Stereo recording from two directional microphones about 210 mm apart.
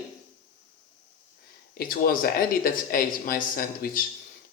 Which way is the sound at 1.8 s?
45° left (ahead or behind).